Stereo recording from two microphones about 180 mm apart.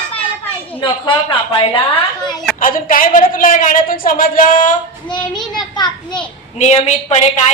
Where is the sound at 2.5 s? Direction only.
50° left (ahead or behind).